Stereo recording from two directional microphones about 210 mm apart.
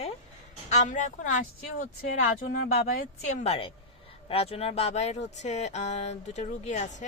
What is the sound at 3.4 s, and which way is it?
A woman's voice, 25° left (ahead or behind).